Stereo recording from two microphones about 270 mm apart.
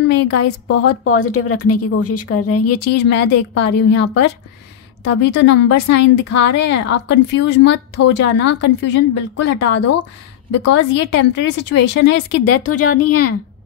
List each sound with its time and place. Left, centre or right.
0.3 s a woman's voice: left
2.8 s a woman's voice: left
12.4 s a woman's voice: left